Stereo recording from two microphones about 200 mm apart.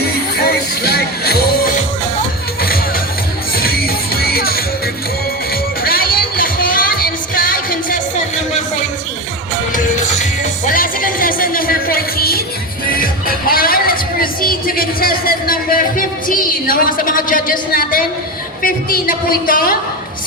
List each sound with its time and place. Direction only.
0.3 s music: 50° left (ahead or behind)
5.8 s music: 45° left (ahead or behind)
9.7 s music: 35° left (ahead or behind)
10.8 s a sound: 45° left (ahead or behind)
12.9 s music: 45° left (ahead or behind)
18.6 s a woman's voice: 45° left (ahead or behind)